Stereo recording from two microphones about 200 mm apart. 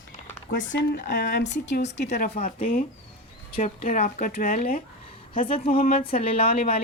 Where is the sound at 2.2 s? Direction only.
30° left (ahead or behind).